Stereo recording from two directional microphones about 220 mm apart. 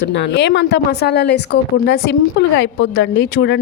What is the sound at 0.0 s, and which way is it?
Speech, 55° left (ahead or behind).